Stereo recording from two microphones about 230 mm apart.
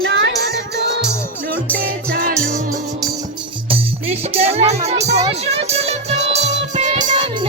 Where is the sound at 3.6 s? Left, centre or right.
Right.